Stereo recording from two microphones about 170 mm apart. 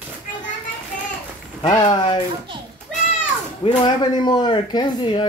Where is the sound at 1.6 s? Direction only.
25° left (ahead or behind).